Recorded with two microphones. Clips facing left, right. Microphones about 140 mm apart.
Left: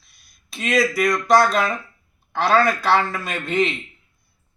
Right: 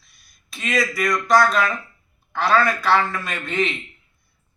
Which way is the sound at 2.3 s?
35° left (ahead or behind).